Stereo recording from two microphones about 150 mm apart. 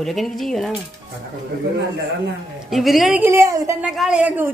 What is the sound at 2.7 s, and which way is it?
Speech, centre (ahead or behind).